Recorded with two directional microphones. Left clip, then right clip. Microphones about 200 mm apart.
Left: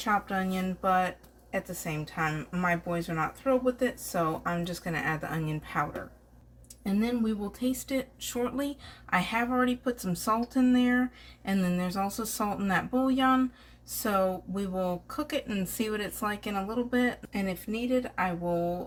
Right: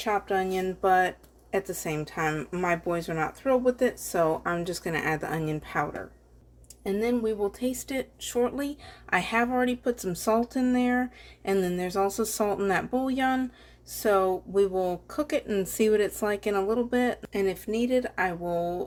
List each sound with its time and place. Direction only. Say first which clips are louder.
0.0 s speech: right 2 dB; 35° right (ahead or behind)
6.8 s speech: right 4 dB; 35° right (ahead or behind)